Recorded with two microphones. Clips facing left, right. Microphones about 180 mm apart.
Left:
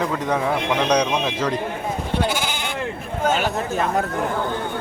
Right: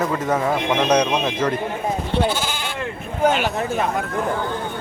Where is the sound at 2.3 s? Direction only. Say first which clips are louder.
Even; 15° left (ahead or behind).